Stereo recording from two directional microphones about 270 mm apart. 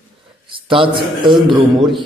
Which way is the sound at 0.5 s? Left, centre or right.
Centre.